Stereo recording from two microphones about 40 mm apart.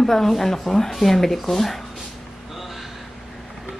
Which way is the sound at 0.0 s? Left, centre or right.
Centre.